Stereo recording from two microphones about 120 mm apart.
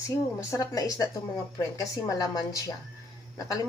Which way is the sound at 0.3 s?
25° left (ahead or behind).